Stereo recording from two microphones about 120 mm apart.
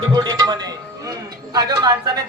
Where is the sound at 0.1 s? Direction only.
35° right (ahead or behind).